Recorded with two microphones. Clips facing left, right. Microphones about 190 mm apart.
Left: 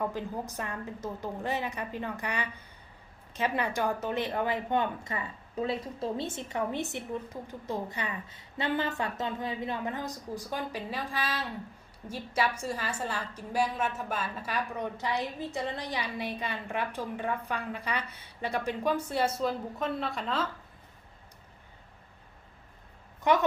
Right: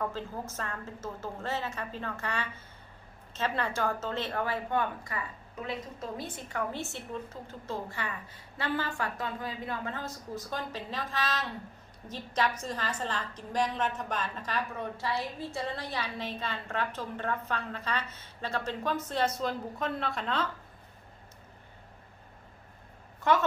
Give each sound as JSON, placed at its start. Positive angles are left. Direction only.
{"t": 0.0, "sound": "a woman's voice", "side_deg": 15}
{"t": 23.3, "sound": "a woman's voice", "side_deg": 15}